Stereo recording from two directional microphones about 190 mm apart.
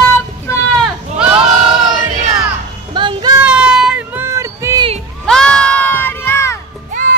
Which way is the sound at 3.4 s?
5° right (ahead or behind).